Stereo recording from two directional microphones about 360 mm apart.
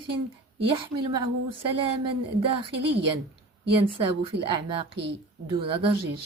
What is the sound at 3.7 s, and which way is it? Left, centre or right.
A woman's voice, centre.